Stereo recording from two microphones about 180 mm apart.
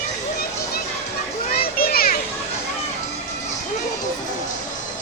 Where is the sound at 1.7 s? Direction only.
55° left (ahead or behind).